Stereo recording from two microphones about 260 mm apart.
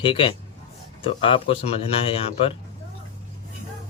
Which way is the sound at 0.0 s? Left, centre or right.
Centre.